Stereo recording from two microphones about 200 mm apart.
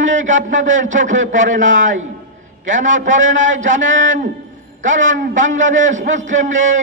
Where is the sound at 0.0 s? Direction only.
70° right (ahead or behind).